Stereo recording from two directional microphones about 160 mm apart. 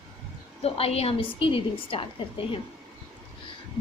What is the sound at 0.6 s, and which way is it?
A woman's voice, 40° left (ahead or behind).